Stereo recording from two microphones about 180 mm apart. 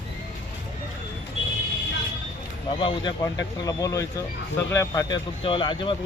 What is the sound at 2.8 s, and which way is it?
Speech, 25° left (ahead or behind).